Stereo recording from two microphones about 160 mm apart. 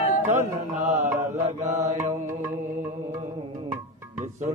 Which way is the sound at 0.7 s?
55° right (ahead or behind).